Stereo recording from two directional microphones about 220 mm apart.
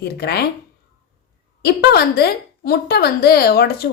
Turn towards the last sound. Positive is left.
turn(degrees=45)  # may be behind; listen again after turning